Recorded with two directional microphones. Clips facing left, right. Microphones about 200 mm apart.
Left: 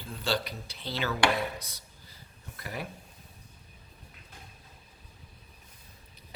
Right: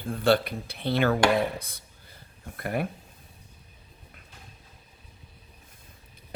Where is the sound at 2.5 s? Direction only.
55° right (ahead or behind).